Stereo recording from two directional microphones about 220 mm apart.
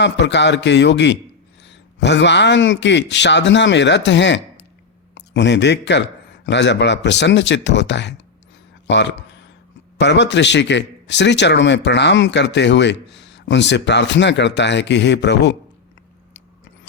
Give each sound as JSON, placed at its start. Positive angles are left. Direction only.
{"t": 0.0, "sound": "a man's voice", "side_deg": 55}